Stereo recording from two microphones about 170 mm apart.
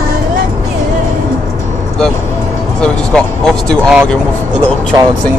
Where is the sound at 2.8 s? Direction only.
5° left (ahead or behind).